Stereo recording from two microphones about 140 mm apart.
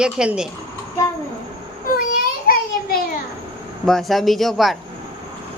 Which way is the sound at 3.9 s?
Centre (ahead or behind).